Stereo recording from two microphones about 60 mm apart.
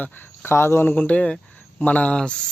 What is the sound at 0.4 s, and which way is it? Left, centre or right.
Speech, left.